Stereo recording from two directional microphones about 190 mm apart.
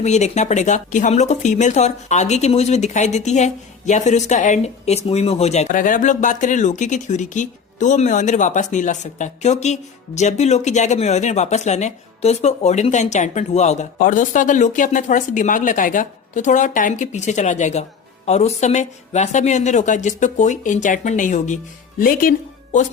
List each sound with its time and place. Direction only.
0.0 s speech: 35° left (ahead or behind)